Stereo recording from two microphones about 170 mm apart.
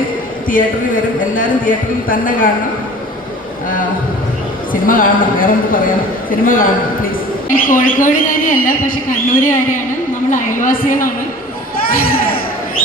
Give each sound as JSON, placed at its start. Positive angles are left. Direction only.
{"t": 0.4, "sound": "a woman's voice", "side_deg": 55}
{"t": 4.7, "sound": "a man's voice", "side_deg": 55}